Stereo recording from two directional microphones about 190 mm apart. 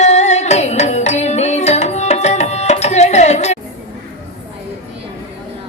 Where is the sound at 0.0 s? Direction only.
35° left (ahead or behind).